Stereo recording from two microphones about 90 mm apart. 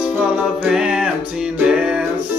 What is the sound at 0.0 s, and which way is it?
Music, 10° right (ahead or behind).